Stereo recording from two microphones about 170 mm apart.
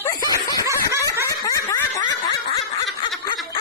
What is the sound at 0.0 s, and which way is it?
Snicker, 20° left (ahead or behind).